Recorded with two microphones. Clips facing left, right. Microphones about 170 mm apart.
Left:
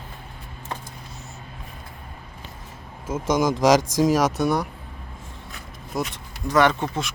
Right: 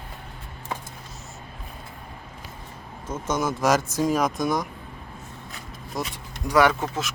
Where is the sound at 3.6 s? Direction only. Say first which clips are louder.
Left 4 dB; 90° left.